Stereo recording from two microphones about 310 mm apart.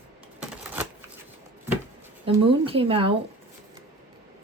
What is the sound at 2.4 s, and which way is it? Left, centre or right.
Speech, centre.